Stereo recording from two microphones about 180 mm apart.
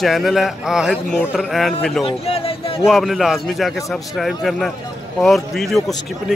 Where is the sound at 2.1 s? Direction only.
35° left (ahead or behind).